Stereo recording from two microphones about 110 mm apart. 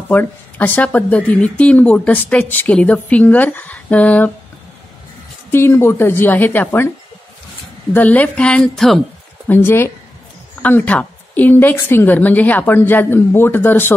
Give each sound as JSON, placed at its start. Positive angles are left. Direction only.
{"t": 0.1, "sound": "speech", "side_deg": 15}
{"t": 5.5, "sound": "a woman's voice", "side_deg": 20}
{"t": 7.9, "sound": "speech", "side_deg": 15}
{"t": 9.5, "sound": "a woman's voice", "side_deg": 20}